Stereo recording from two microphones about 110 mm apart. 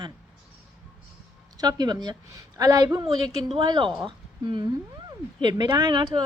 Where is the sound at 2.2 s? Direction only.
30° right (ahead or behind).